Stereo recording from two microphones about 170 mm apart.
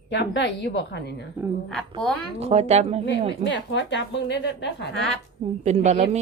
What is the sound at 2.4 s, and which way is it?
Speech, 40° right (ahead or behind).